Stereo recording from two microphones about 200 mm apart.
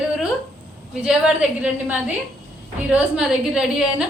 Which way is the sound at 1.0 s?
5° right (ahead or behind).